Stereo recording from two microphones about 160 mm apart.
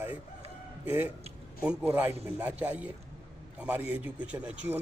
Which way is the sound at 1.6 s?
10° right (ahead or behind).